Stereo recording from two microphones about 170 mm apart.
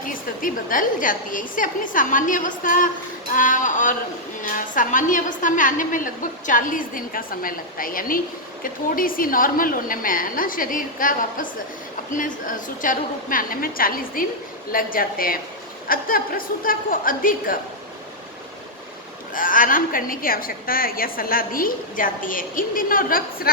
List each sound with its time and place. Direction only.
0.0 s a woman's voice: 55° left (ahead or behind)
19.3 s a woman's voice: 55° left (ahead or behind)